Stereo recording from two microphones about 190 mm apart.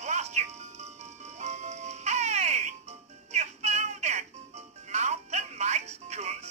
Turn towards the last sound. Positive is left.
turn(degrees=-35)  # may be behind; listen again after turning